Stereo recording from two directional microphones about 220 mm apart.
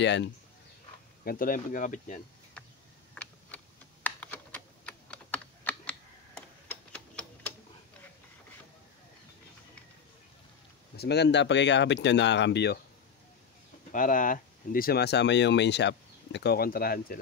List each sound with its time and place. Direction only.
0.0 s speech: 55° left (ahead or behind)
1.2 s speech: 40° left (ahead or behind)
2.6 s a sound: 5° left (ahead or behind)
3.2 s typing: 5° left (ahead or behind)
11.0 s speech: 50° left (ahead or behind)
13.9 s speech: 35° left (ahead or behind)